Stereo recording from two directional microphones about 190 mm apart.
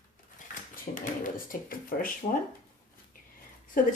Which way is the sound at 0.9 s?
45° left (ahead or behind).